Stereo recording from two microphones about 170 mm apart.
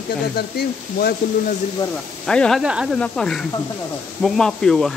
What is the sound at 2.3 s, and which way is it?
Speech, 5° left (ahead or behind).